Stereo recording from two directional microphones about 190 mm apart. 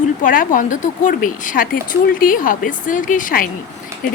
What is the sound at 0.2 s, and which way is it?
Speech, 45° left (ahead or behind).